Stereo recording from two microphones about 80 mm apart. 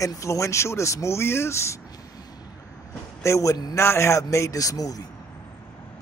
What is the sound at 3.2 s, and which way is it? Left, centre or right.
A man's voice, left.